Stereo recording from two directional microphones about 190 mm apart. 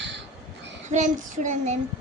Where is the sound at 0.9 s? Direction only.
40° right (ahead or behind).